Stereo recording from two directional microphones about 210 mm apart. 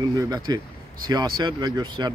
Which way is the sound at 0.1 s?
15° right (ahead or behind).